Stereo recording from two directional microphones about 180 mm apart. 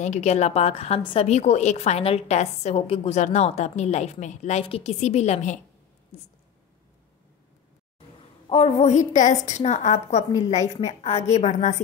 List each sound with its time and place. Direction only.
0.0 s a woman's voice: 40° left (ahead or behind)
8.5 s a woman's voice: 35° left (ahead or behind)